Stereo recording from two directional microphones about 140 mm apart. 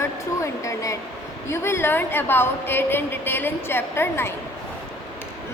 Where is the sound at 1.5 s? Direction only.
20° left (ahead or behind).